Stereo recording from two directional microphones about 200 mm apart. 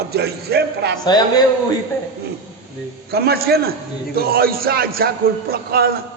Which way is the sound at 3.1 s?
50° right (ahead or behind).